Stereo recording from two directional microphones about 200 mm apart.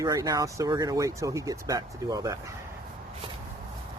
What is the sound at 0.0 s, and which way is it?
Speech, 15° right (ahead or behind).